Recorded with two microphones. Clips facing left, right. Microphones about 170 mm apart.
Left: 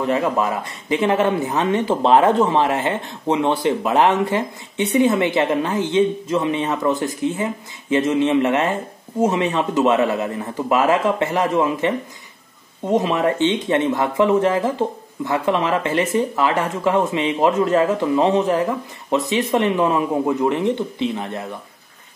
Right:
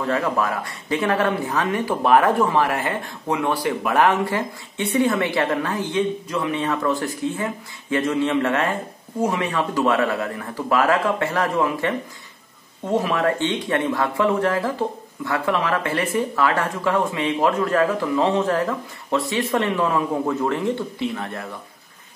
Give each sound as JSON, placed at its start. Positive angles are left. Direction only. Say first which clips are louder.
{"t": 0.0, "sound": "speech", "louder": "left 3 dB", "side_deg": 20}